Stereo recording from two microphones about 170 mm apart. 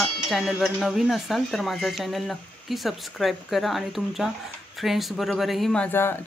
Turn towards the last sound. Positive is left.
turn(degrees=15)  # may be behind; listen again after turning